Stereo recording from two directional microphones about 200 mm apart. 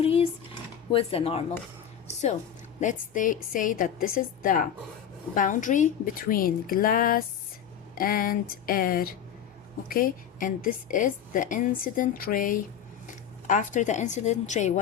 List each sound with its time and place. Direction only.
0.0 s dishes: 30° left (ahead or behind)
0.9 s speech: 30° left (ahead or behind)
2.8 s a woman's voice: 40° left (ahead or behind)